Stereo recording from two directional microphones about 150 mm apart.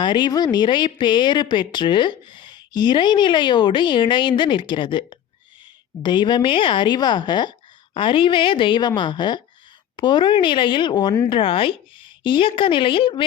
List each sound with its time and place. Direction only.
0.0 s speech: 30° left (ahead or behind)